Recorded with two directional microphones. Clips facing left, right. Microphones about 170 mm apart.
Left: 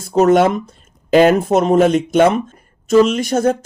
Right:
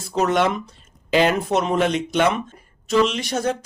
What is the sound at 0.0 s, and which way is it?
Speech, 45° left (ahead or behind).